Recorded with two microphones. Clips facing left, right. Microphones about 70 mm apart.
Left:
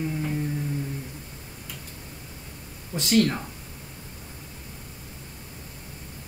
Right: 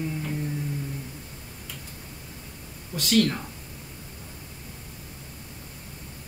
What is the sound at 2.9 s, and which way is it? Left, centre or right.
Speech, left.